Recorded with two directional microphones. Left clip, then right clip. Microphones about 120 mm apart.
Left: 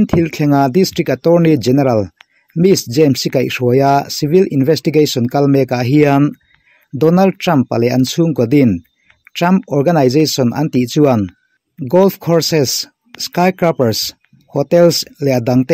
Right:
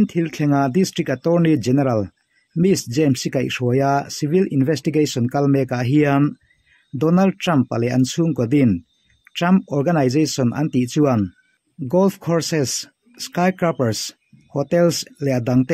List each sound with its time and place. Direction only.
0.0 s speech: 30° left (ahead or behind)